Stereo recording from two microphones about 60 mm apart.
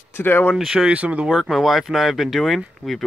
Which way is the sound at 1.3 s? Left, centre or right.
Centre.